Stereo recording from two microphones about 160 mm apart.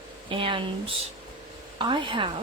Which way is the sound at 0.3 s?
35° right (ahead or behind).